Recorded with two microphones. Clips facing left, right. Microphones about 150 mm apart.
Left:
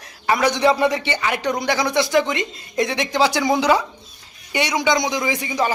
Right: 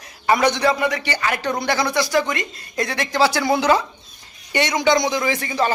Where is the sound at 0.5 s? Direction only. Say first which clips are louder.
Left 3 dB; 25° left (ahead or behind).